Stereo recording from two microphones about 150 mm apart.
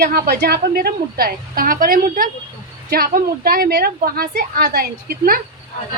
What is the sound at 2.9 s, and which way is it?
A woman's voice, 85° right.